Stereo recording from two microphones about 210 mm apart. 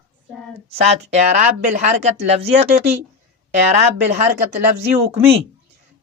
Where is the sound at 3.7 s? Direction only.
30° right (ahead or behind).